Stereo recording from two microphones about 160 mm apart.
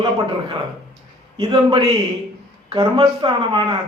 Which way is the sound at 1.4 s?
30° right (ahead or behind).